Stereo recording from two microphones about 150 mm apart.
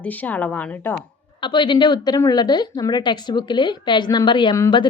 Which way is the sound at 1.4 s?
30° left (ahead or behind).